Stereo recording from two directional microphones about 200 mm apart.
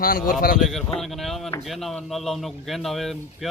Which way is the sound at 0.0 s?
45° left (ahead or behind).